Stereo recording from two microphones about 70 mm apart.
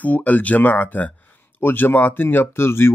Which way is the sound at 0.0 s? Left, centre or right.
Left.